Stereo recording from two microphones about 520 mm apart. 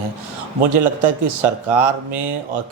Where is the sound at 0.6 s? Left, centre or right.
Right.